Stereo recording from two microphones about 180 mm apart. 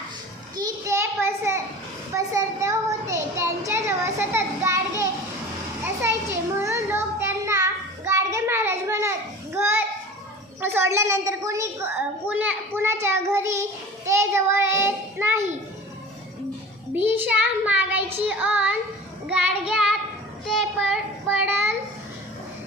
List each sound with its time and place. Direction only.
0.5 s a sound: 20° right (ahead or behind)
3.7 s a child's voice: 15° right (ahead or behind)
5.8 s children playing: 15° right (ahead or behind)
6.6 s child singing: 15° right (ahead or behind)
10.6 s a woman's voice: 10° right (ahead or behind)
16.9 s a woman's voice: 10° right (ahead or behind)
19.3 s child singing: 5° right (ahead or behind)